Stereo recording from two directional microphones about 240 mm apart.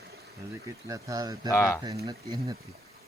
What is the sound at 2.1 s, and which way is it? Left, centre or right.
Speech, centre.